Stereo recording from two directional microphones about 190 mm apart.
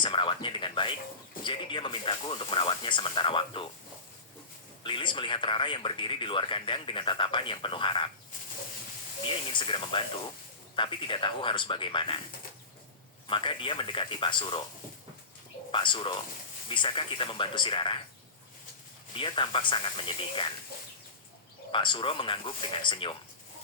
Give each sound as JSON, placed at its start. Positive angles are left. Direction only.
{"t": 0.0, "sound": "speech", "side_deg": 25}
{"t": 4.8, "sound": "speech", "side_deg": 25}
{"t": 9.2, "sound": "speech", "side_deg": 25}
{"t": 13.2, "sound": "speech", "side_deg": 25}
{"t": 15.7, "sound": "speech", "side_deg": 25}
{"t": 19.1, "sound": "speech", "side_deg": 25}
{"t": 21.7, "sound": "speech", "side_deg": 25}